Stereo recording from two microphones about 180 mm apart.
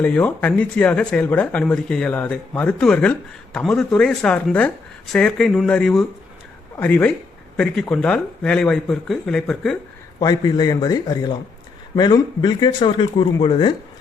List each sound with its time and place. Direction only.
0.0 s speech: 5° left (ahead or behind)
10.2 s speech: 20° left (ahead or behind)